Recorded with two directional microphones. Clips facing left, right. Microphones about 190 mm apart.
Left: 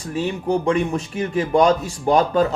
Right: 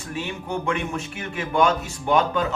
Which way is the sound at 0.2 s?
35° left (ahead or behind).